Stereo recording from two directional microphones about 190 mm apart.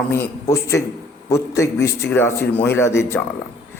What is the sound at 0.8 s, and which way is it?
A man's voice, 15° left (ahead or behind).